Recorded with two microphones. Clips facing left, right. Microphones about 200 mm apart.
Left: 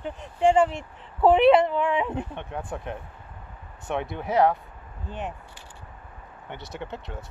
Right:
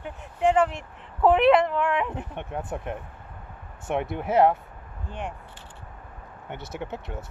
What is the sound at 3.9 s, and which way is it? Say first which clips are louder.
Speech: right 2 dB; 5° right (ahead or behind).